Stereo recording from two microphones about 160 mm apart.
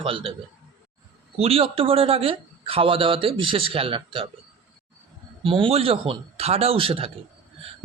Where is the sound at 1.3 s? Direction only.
35° right (ahead or behind).